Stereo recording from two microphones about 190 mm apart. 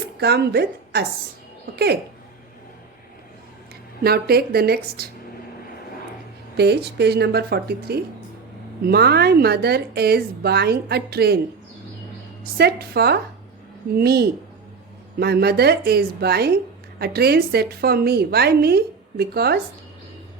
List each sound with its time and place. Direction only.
0.2 s a woman's voice: 60° right (ahead or behind)
4.0 s a woman's voice: 55° right (ahead or behind)
6.6 s a woman's voice: 60° right (ahead or behind)
12.5 s a woman's voice: 55° right (ahead or behind)